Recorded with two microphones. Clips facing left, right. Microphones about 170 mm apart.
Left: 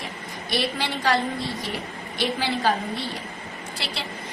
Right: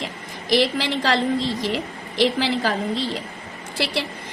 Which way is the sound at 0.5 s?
90° right.